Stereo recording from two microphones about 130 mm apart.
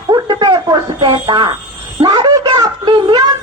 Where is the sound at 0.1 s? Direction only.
35° right (ahead or behind).